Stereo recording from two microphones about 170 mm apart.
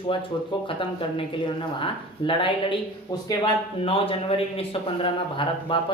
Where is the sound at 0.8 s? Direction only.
30° left (ahead or behind).